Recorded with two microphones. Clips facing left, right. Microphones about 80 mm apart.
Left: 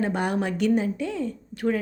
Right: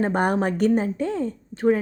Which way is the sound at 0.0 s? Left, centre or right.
Right.